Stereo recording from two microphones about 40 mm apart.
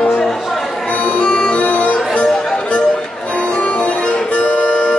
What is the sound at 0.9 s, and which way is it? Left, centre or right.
Music, left.